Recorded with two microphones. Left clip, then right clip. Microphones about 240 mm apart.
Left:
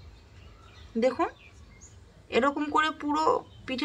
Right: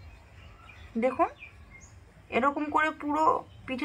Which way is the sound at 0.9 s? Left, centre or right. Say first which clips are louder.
Even; centre.